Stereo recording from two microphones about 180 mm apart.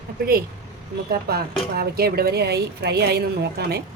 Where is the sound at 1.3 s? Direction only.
60° right (ahead or behind).